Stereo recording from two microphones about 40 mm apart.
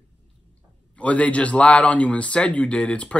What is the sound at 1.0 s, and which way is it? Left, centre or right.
Speech, left.